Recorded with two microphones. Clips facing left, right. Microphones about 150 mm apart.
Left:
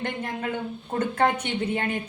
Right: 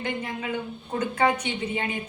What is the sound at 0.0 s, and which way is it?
A woman's voice, 55° left (ahead or behind).